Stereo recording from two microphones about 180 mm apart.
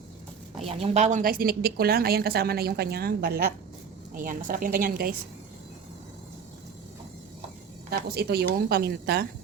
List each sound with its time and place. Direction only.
0.7 s a woman's voice: 35° right (ahead or behind); by 5.1 s 55° right (ahead or behind)
7.9 s speech: 60° right (ahead or behind)